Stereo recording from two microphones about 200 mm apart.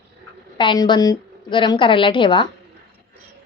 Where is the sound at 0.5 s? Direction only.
25° left (ahead or behind).